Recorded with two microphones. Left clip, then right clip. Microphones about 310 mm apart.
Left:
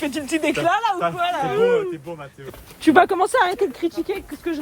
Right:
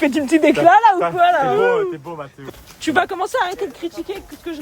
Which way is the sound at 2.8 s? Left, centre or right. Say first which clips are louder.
Left 3 dB; centre.